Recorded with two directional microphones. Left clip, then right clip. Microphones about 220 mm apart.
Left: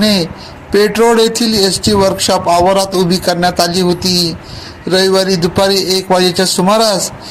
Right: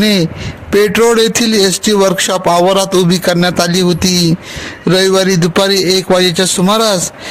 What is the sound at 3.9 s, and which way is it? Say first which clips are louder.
Speech: even; 60° right (ahead or behind).